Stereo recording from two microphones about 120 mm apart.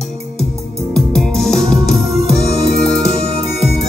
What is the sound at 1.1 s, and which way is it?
Music, 5° left (ahead or behind).